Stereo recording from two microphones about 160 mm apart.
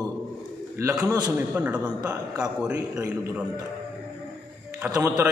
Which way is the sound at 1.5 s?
10° right (ahead or behind).